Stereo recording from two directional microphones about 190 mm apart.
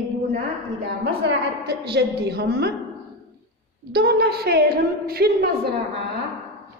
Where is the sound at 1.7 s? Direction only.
60° right (ahead or behind).